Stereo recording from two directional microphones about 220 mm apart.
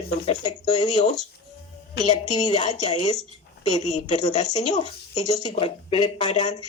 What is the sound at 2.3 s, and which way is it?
Speech, 20° left (ahead or behind).